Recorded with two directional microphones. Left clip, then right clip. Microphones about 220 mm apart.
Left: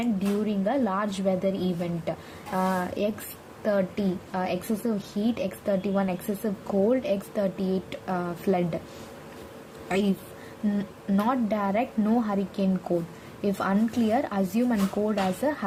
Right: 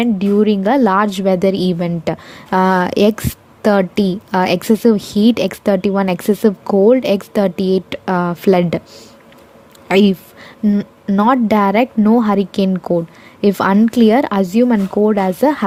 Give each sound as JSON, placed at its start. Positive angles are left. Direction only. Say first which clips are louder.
{"t": 0.0, "sound": "a woman's voice", "louder": "right 14 dB", "side_deg": -45}
{"t": 9.9, "sound": "a woman's voice", "louder": "right 14 dB", "side_deg": -45}